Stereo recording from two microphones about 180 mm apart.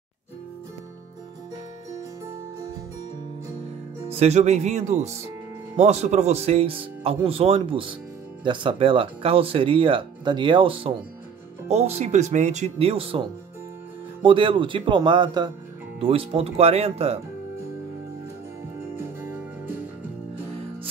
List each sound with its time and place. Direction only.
4.0 s speech: 35° right (ahead or behind)
14.2 s speech: 30° right (ahead or behind)
18.9 s music: 10° right (ahead or behind)